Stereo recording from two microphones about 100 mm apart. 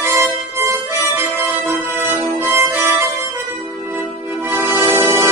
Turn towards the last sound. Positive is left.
turn(degrees=-30)  # may be behind; listen again after turning